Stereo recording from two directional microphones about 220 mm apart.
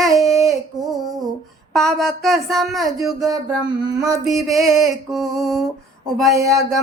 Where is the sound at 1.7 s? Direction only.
Centre (ahead or behind).